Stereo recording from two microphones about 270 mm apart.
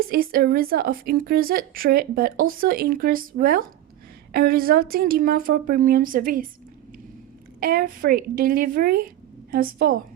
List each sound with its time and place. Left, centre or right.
0.0 s a woman's voice: right
7.6 s a woman's voice: right